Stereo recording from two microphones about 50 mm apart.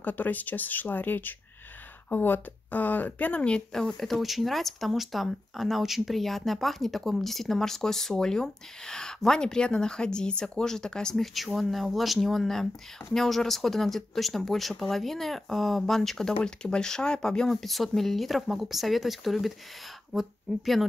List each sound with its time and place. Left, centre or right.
0.0 s speech: left
3.7 s speech: centre
11.3 s speech: centre